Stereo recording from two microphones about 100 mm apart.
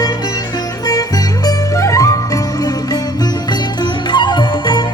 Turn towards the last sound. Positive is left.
turn(degrees=50)  # may be behind; listen again after turning